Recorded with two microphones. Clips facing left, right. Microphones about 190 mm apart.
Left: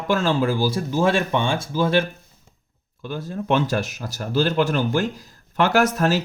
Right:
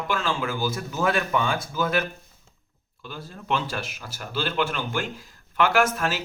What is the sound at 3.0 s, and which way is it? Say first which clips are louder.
Speech: left 10 dB; 45° left (ahead or behind).